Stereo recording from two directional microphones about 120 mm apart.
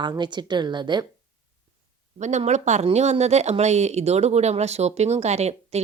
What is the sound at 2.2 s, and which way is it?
Speech, 80° right.